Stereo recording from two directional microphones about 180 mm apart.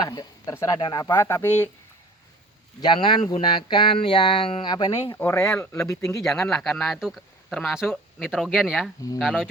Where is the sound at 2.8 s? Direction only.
25° left (ahead or behind).